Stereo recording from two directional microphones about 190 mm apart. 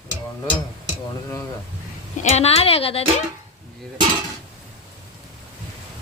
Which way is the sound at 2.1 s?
35° left (ahead or behind).